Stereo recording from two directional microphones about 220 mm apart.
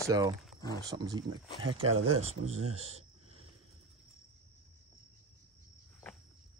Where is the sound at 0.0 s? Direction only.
15° right (ahead or behind).